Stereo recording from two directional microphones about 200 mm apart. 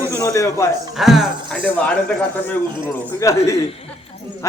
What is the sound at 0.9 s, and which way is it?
Speech, centre (ahead or behind).